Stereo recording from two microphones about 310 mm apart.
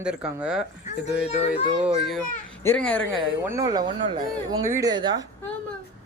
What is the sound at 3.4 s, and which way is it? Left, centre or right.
Speech, centre.